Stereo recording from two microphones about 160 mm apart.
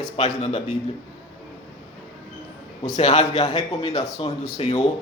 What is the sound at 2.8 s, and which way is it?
Speech, 45° left (ahead or behind).